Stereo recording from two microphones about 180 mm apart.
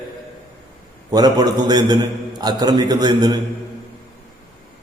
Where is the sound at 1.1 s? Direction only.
20° right (ahead or behind).